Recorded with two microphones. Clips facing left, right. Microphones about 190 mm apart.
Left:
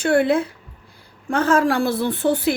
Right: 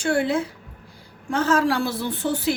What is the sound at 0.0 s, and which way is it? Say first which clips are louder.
A woman's voice: left 4 dB; 60° left (ahead or behind).